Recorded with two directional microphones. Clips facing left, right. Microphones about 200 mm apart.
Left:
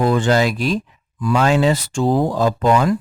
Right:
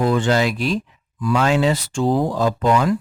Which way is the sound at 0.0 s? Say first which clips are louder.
Left 2 dB; 45° left (ahead or behind).